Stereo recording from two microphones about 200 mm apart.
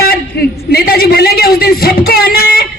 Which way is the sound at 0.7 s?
50° left (ahead or behind).